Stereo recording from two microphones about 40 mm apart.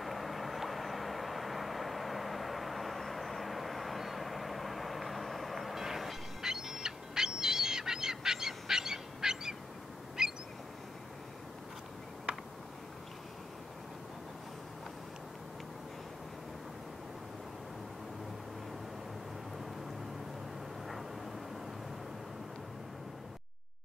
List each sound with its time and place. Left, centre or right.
0.0 s vehicle: centre
5.9 s bird: centre
10.2 s a sound: centre